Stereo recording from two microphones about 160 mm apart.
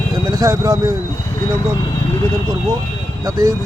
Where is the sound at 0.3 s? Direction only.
20° right (ahead or behind).